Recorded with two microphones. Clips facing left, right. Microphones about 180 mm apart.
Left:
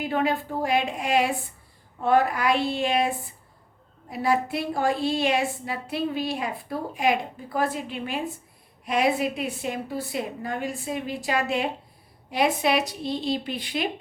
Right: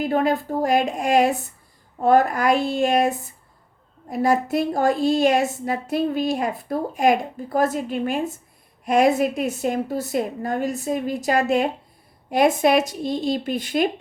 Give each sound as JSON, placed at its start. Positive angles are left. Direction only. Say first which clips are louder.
{"t": 0.0, "sound": "a woman's voice", "louder": "right 4 dB", "side_deg": -45}